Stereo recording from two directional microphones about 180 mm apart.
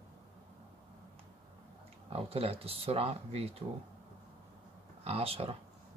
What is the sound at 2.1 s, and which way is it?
Speech, 35° right (ahead or behind).